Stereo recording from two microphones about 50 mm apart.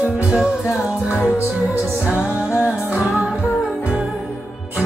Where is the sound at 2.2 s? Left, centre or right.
Right.